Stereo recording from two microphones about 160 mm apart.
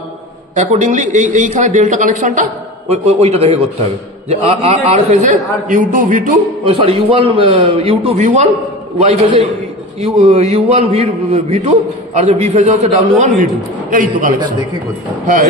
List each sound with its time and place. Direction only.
0.6 s a man's voice: 50° right (ahead or behind)
2.9 s a man's voice: 40° right (ahead or behind)
6.6 s a man's voice: 35° right (ahead or behind)
13.2 s a man's voice: 55° right (ahead or behind)